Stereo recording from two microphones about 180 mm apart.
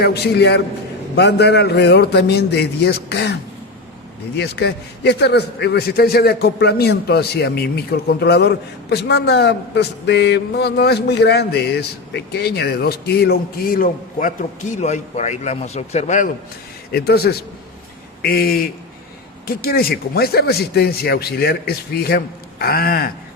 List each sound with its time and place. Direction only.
0.0 s a man's voice: 65° left (ahead or behind)
4.4 s a man's voice: 70° left (ahead or behind); by 16.3 s 45° left (ahead or behind)
16.9 s a man's voice: 60° left (ahead or behind)
19.6 s a man's voice: 55° left (ahead or behind)